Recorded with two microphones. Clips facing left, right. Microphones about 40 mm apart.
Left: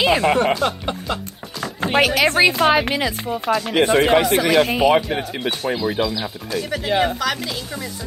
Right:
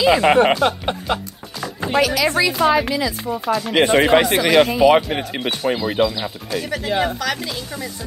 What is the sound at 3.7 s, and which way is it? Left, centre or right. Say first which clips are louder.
Speech: right 2 dB; right.